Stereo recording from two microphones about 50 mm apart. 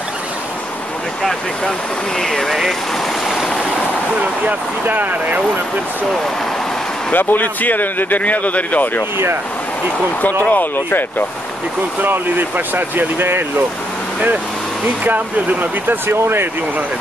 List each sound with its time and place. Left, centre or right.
2.1 s speech: centre
3.3 s stream: centre
4.5 s speech: right
7.1 s speech: left
10.4 s speech: left
12.0 s speech: right
15.0 s speech: right
16.1 s speech: right